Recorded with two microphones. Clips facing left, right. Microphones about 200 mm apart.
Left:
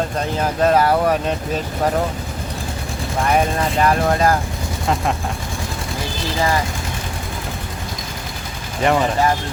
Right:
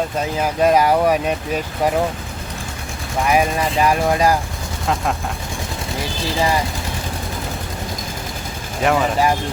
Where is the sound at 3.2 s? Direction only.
10° right (ahead or behind).